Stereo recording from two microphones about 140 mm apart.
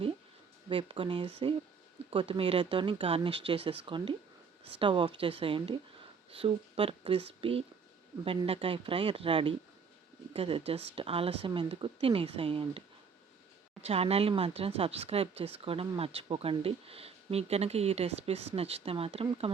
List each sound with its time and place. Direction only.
0.7 s speech: 40° right (ahead or behind)
13.8 s speech: 45° right (ahead or behind)